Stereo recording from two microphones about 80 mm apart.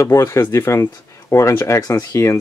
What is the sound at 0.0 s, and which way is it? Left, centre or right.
Speech, left.